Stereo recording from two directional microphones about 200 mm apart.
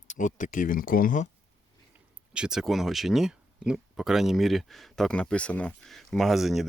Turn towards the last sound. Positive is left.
turn(degrees=0)  # may be behind; listen again after turning